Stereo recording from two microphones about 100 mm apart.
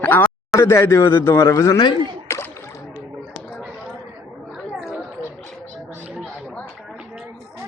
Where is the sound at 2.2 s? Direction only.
25° left (ahead or behind).